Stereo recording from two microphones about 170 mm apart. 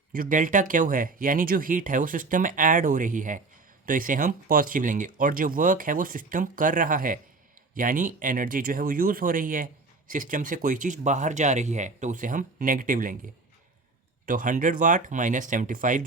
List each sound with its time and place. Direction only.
0.1 s speech: 55° right (ahead or behind)
14.3 s speech: 50° right (ahead or behind)